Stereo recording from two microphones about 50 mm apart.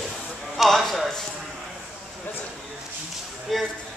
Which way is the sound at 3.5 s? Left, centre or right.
Centre.